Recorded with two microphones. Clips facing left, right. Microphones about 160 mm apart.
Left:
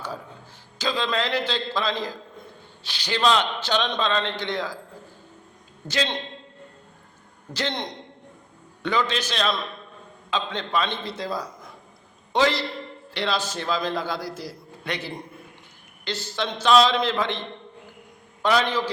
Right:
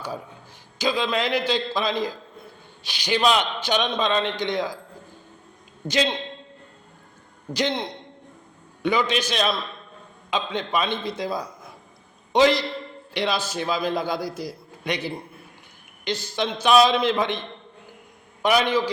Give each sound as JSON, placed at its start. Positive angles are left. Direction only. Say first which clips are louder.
{"t": 0.8, "sound": "a man's voice", "louder": "right 2 dB", "side_deg": -10}
{"t": 7.5, "sound": "a man's voice", "louder": "right 4 dB", "side_deg": -10}
{"t": 18.4, "sound": "a man's voice", "louder": "right 2 dB", "side_deg": -15}